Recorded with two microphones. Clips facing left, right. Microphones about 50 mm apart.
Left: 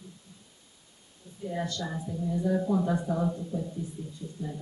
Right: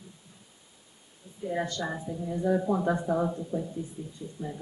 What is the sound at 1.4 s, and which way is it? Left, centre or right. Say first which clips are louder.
Speech: right 2 dB; centre.